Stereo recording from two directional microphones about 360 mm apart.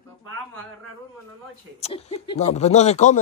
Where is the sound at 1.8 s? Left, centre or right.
Centre.